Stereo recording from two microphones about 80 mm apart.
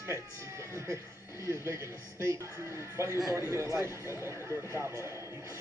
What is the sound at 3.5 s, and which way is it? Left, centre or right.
A man's voice, right.